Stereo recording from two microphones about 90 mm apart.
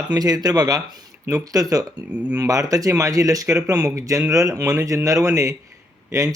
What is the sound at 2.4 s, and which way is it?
Speech, 40° right (ahead or behind).